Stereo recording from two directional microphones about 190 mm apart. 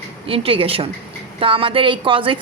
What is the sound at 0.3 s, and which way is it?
A woman's voice, 30° right (ahead or behind).